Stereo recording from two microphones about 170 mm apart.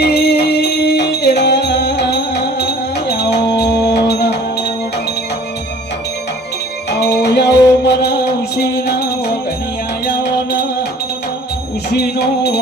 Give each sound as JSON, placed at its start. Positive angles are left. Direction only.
{"t": 0.0, "sound": "music", "side_deg": 70}
{"t": 6.9, "sound": "music", "side_deg": 75}
{"t": 11.9, "sound": "music", "side_deg": 75}